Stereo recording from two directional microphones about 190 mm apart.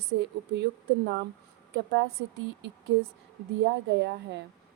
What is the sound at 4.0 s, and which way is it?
Speech, 60° right (ahead or behind).